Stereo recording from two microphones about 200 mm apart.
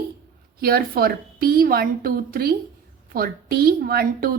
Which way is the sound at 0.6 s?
50° right (ahead or behind).